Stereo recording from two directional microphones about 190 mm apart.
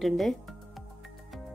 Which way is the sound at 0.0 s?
Centre (ahead or behind).